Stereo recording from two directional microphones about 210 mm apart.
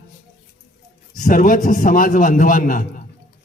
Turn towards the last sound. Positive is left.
turn(degrees=40)  # may be behind; listen again after turning